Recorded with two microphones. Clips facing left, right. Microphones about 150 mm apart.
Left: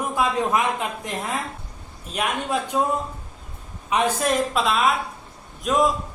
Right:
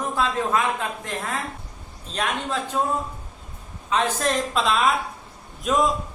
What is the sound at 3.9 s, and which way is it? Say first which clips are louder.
A man's voice: left 1 dB; 10° left (ahead or behind).